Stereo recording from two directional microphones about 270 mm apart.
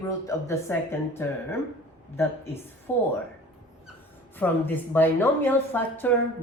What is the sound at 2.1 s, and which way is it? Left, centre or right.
Speech, centre.